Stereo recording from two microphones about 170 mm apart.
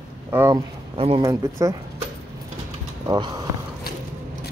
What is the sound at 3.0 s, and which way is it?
Speech, 25° right (ahead or behind).